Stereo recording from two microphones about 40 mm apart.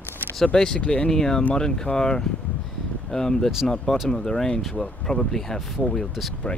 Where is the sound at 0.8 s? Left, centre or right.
Left.